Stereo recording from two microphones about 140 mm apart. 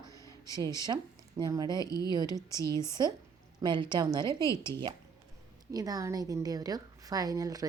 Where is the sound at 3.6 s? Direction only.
35° right (ahead or behind).